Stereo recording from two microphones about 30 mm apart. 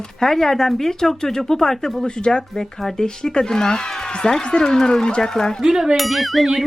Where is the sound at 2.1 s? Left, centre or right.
Left.